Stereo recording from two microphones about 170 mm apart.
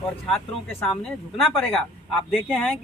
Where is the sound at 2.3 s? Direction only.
5° left (ahead or behind).